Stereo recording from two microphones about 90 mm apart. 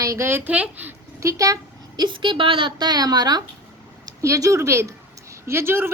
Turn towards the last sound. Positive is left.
turn(degrees=-25)  # may be behind; listen again after turning